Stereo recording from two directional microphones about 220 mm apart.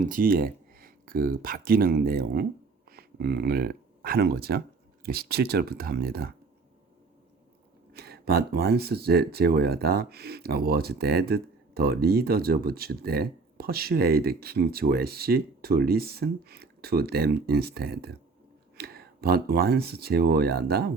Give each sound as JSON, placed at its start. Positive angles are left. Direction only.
{"t": 0.0, "sound": "speech", "side_deg": -40}
{"t": 7.9, "sound": "speech", "side_deg": -45}